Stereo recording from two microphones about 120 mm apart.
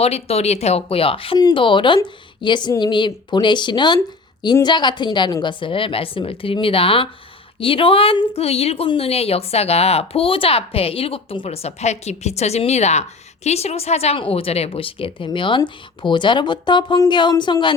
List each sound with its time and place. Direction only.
0.0 s speech: 60° left (ahead or behind)
1.4 s a woman's voice: 40° left (ahead or behind)